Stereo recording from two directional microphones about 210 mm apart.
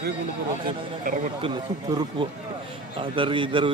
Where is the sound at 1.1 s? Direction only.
40° right (ahead or behind).